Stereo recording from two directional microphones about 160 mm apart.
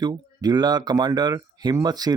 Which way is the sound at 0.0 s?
25° right (ahead or behind).